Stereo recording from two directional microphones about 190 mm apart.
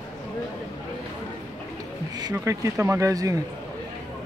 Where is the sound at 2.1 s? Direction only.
20° right (ahead or behind).